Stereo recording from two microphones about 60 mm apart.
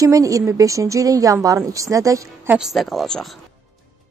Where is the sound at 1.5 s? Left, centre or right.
Right.